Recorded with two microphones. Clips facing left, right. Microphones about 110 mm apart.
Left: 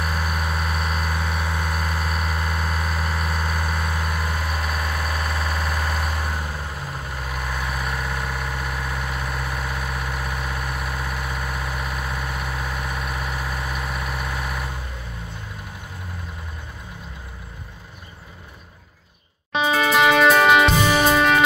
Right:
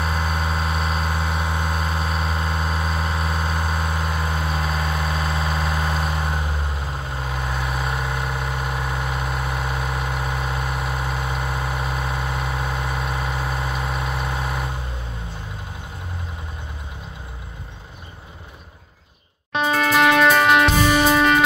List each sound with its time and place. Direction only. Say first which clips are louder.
0.0 s vehicle: right 2 dB; 25° right (ahead or behind)
19.5 s music: even; centre (ahead or behind)